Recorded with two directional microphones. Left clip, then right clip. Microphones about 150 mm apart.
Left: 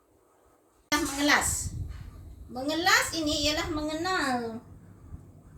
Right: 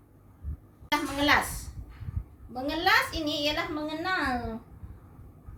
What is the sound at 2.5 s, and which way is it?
A woman's voice, 15° right (ahead or behind).